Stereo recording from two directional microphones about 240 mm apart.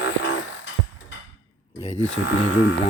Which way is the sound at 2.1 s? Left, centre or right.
Left.